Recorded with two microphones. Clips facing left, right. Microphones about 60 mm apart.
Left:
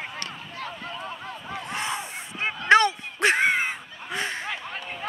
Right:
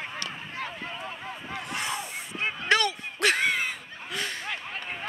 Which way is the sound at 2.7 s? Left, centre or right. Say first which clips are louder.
Left 7 dB; left.